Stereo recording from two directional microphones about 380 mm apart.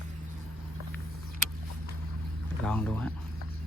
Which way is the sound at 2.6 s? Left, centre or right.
Centre.